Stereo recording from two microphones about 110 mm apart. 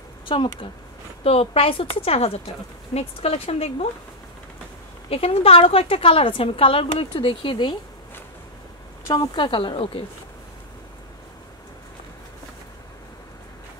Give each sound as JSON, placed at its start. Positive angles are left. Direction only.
{"t": 0.3, "sound": "speech", "side_deg": 55}
{"t": 1.2, "sound": "a woman's voice", "side_deg": 65}
{"t": 5.1, "sound": "a woman's voice", "side_deg": 60}
{"t": 9.0, "sound": "speech", "side_deg": 40}